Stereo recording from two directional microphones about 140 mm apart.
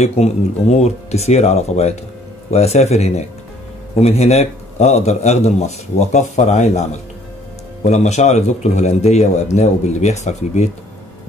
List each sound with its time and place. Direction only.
0.0 s a man's voice: 50° left (ahead or behind)